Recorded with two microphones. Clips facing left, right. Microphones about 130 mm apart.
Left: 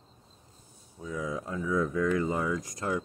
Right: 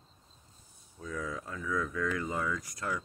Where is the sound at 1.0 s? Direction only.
15° left (ahead or behind).